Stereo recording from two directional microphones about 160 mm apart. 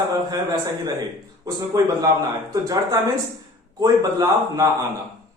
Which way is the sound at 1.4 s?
25° right (ahead or behind).